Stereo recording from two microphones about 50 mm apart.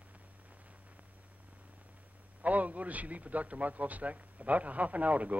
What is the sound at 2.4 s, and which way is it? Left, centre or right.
A man's voice, right.